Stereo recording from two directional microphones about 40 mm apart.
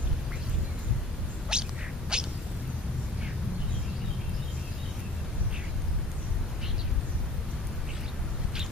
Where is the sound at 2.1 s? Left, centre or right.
Right.